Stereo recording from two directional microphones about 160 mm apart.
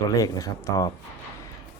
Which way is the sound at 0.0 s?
20° left (ahead or behind).